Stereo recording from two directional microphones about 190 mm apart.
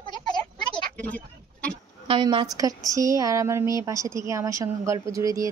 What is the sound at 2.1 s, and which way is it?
A woman's voice, 25° right (ahead or behind).